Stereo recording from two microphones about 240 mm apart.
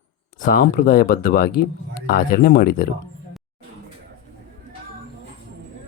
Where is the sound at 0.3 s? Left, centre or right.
Left.